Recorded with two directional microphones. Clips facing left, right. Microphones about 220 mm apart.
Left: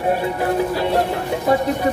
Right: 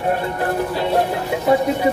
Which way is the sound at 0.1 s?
10° left (ahead or behind).